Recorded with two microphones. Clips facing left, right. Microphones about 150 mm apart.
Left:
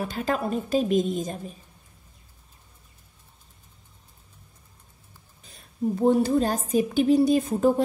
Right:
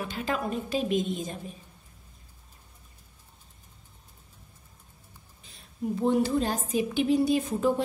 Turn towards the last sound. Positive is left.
turn(degrees=40)  # may be behind; listen again after turning